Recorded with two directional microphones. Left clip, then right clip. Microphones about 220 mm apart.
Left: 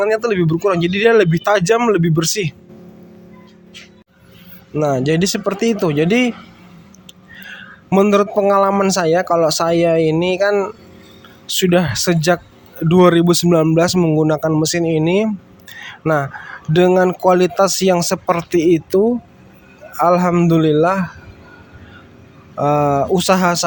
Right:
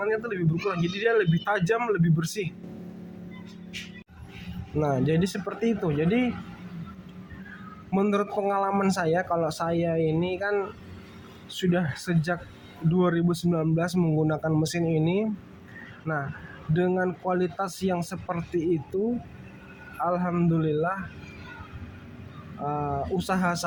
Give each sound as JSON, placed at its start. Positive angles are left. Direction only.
{"t": 0.0, "sound": "a man's voice", "side_deg": 45}
{"t": 4.8, "sound": "a man's voice", "side_deg": 40}
{"t": 7.9, "sound": "a man's voice", "side_deg": 40}
{"t": 16.7, "sound": "a man's voice", "side_deg": 50}
{"t": 20.0, "sound": "a man's voice", "side_deg": 50}
{"t": 22.6, "sound": "a man's voice", "side_deg": 50}